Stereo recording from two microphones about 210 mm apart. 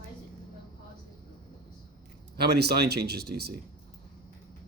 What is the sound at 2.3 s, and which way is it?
Speech, 50° right (ahead or behind).